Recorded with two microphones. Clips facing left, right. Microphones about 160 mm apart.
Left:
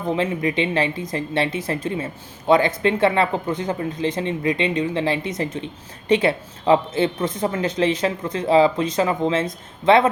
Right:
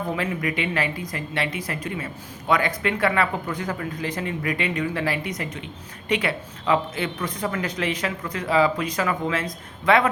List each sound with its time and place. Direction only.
0.1 s speech: 25° left (ahead or behind)